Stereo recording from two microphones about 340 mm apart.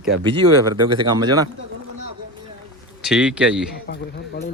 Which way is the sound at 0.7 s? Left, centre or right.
Centre.